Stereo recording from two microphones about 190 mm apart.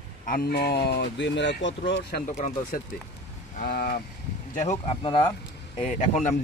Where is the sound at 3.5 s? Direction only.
50° left (ahead or behind).